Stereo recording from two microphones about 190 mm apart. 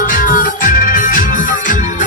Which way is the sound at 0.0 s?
45° left (ahead or behind).